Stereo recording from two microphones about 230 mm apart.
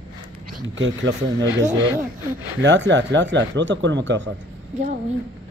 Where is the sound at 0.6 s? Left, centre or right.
Right.